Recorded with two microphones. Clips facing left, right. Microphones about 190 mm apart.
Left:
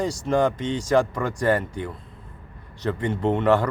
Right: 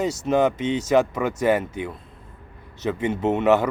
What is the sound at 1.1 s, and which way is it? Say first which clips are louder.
Speech: right 2 dB; 5° right (ahead or behind).